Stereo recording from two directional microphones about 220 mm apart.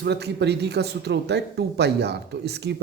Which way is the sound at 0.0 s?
50° right (ahead or behind).